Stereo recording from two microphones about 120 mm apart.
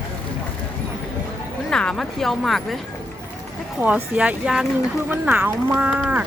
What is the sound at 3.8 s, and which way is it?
Speech, 10° right (ahead or behind).